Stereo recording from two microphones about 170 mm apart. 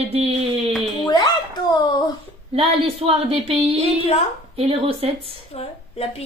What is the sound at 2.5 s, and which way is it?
A woman's voice, 35° right (ahead or behind).